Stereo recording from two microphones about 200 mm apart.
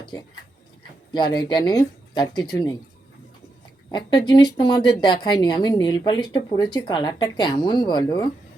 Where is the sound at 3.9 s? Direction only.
20° left (ahead or behind).